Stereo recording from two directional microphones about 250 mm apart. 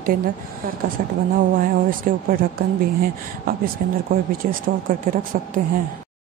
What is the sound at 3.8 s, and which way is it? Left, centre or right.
Speech, right.